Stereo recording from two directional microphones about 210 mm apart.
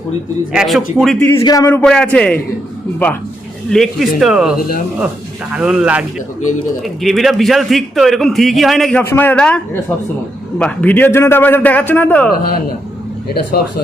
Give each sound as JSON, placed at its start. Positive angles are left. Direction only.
{"t": 0.5, "sound": "a man's voice", "side_deg": 0}
{"t": 1.4, "sound": "a man's voice", "side_deg": 20}
{"t": 1.8, "sound": "a man's voice", "side_deg": 5}
{"t": 5.5, "sound": "a man's voice", "side_deg": -5}
{"t": 10.6, "sound": "a man's voice", "side_deg": 5}